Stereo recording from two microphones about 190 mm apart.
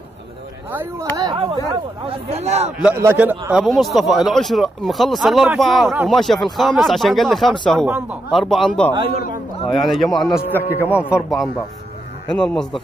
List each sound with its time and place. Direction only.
0.7 s speech: 10° right (ahead or behind)
1.1 s speech: 25° right (ahead or behind)
2.8 s a man's voice: 10° right (ahead or behind)
10.5 s a man's voice: 10° left (ahead or behind)
11.0 s a man's voice: 5° right (ahead or behind)